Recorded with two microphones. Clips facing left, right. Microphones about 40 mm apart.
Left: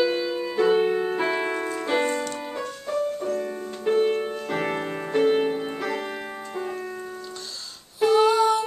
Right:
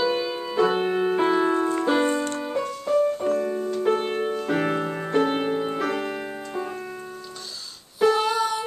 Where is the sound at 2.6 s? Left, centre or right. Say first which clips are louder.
Right 5 dB; centre.